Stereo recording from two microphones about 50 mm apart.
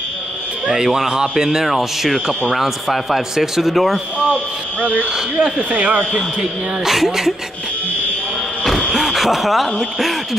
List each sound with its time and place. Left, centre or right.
0.7 s speech: centre
5.4 s speech: right
6.8 s speech: centre
8.9 s speech: centre